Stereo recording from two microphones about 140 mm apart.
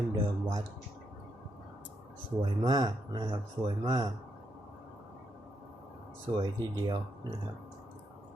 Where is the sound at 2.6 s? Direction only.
30° right (ahead or behind).